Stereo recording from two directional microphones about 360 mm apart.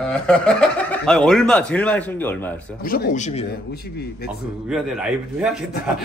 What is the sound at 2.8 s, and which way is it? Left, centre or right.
Speech, left.